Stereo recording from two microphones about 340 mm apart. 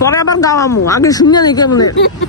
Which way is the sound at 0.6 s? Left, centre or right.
Left.